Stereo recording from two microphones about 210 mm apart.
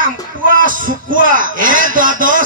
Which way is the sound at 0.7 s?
40° right (ahead or behind).